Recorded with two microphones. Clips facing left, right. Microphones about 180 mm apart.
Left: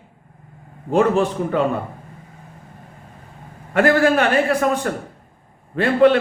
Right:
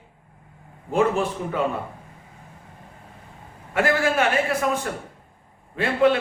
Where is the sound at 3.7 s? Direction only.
50° left (ahead or behind).